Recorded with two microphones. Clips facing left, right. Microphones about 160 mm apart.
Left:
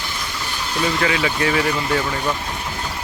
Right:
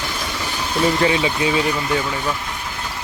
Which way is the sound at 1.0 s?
25° right (ahead or behind).